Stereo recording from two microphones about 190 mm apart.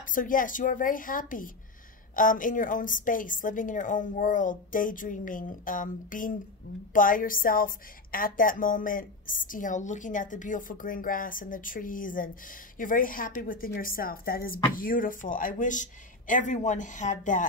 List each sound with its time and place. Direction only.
0.1 s a woman's voice: 45° left (ahead or behind)